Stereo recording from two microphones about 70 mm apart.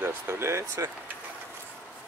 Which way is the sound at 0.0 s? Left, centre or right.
Right.